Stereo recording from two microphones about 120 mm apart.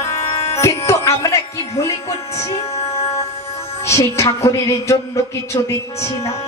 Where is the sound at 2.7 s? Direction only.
60° left (ahead or behind).